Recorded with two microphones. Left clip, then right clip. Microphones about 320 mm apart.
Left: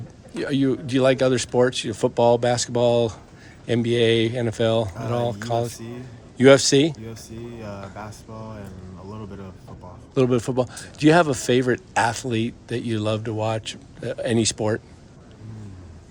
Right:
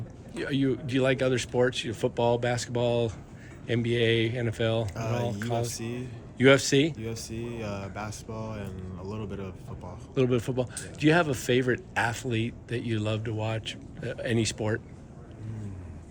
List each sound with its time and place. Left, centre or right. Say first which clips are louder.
0.3 s speech: left 6 dB; centre